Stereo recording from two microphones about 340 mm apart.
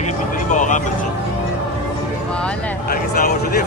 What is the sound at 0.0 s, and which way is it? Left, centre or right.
Vehicle, left.